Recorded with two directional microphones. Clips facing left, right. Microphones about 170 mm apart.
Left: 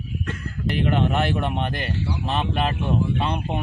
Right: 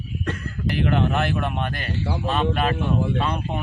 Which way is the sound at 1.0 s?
20° left (ahead or behind).